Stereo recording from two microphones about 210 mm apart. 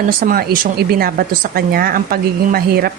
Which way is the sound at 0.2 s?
40° right (ahead or behind).